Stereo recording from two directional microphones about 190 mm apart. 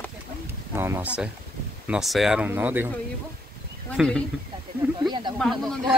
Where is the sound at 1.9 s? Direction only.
Centre (ahead or behind).